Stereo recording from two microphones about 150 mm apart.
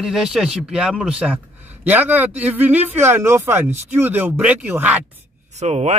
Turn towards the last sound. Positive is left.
turn(degrees=-50)  # may be behind; listen again after turning